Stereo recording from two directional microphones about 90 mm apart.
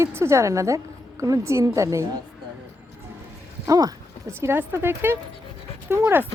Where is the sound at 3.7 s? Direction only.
45° right (ahead or behind).